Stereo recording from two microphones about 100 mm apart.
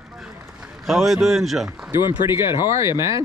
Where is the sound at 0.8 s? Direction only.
Centre (ahead or behind).